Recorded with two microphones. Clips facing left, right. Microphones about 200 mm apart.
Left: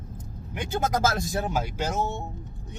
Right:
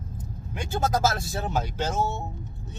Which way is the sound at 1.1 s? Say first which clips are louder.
Left 1 dB; 15° left (ahead or behind).